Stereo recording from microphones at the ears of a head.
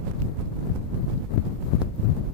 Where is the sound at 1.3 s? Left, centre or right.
Left.